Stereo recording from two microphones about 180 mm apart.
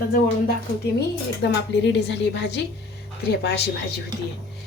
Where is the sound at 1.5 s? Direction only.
70° left (ahead or behind).